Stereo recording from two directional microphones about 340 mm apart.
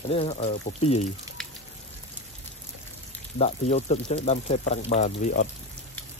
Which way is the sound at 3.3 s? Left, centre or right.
Centre.